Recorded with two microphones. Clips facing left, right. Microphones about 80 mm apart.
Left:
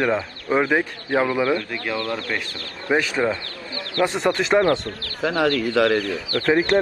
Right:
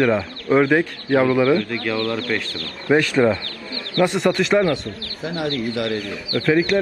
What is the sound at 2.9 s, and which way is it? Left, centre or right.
Speech, centre.